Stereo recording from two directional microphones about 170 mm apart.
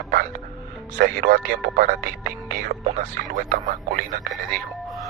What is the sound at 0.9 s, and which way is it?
Speech, 60° right (ahead or behind).